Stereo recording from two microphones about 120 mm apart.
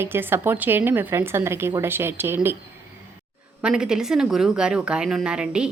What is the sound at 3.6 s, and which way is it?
Speech, 5° right (ahead or behind).